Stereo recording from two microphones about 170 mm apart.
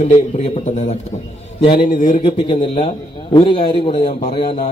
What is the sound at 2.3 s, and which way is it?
A man's voice, 30° left (ahead or behind).